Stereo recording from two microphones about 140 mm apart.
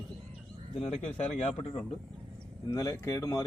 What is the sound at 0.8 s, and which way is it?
A man's voice, 50° left (ahead or behind).